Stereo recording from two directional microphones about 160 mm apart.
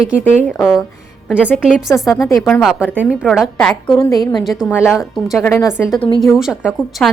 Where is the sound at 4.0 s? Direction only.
25° left (ahead or behind).